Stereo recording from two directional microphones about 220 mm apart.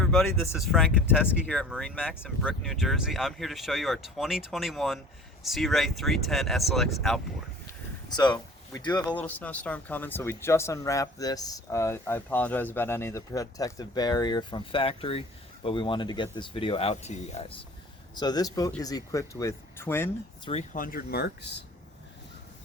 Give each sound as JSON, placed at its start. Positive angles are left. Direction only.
{"t": 0.0, "sound": "speech", "side_deg": 0}
{"t": 8.1, "sound": "speech", "side_deg": 20}
{"t": 9.0, "sound": "speech", "side_deg": 5}
{"t": 18.1, "sound": "speech", "side_deg": 20}
{"t": 20.5, "sound": "speech", "side_deg": 35}